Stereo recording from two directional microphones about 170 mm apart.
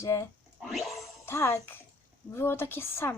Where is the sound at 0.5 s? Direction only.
Centre (ahead or behind).